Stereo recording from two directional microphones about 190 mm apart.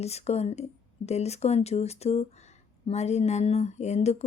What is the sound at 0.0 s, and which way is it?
Speech, 35° left (ahead or behind).